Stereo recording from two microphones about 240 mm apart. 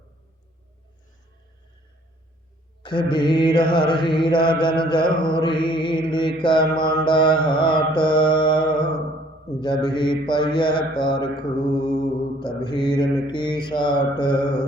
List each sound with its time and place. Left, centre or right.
2.8 s mantra: centre